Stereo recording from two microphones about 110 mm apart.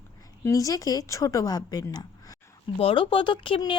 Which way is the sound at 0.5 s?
30° left (ahead or behind).